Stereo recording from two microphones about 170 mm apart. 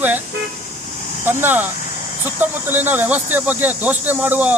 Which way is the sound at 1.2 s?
10° right (ahead or behind).